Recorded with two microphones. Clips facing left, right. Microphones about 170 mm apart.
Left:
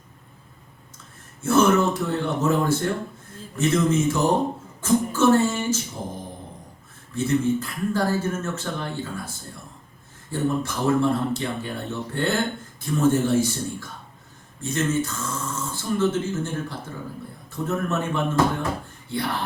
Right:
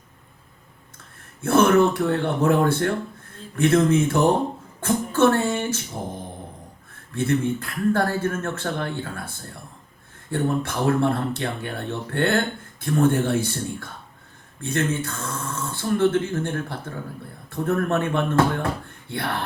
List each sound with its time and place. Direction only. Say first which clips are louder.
1.4 s speech: right 2 dB; 60° right (ahead or behind)
4.8 s a sound: right 1 dB; 60° right (ahead or behind)
7.1 s speech: left 1 dB; 60° right (ahead or behind)
10.3 s speech: right 1 dB; 60° right (ahead or behind)